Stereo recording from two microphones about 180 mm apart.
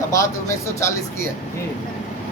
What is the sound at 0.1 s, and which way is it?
Speech, 15° left (ahead or behind).